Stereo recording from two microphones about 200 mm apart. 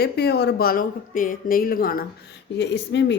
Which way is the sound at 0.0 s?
55° left (ahead or behind).